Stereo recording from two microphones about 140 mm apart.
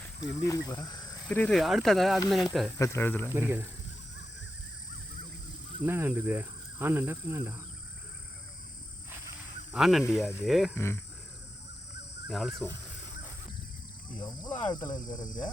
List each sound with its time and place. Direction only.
0.2 s speech: 25° left (ahead or behind)
1.3 s speech: 10° left (ahead or behind)
2.7 s speech: 20° left (ahead or behind)
3.2 s speech: 15° right (ahead or behind)
5.8 s speech: 15° right (ahead or behind)
9.7 s speech: centre (ahead or behind)
10.8 s speech: 20° left (ahead or behind)
12.3 s speech: centre (ahead or behind)
14.3 s speech: 30° left (ahead or behind)